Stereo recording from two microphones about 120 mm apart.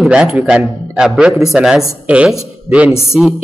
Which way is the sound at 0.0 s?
5° right (ahead or behind).